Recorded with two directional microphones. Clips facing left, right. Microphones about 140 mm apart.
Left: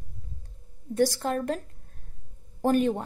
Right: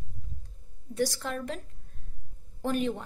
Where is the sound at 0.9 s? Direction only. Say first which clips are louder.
Left 6 dB; 45° left (ahead or behind).